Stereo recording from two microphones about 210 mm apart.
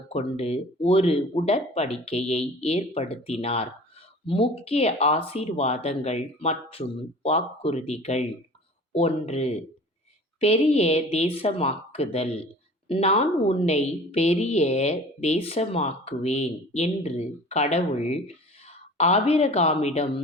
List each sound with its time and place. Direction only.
0.1 s a woman's voice: 30° left (ahead or behind)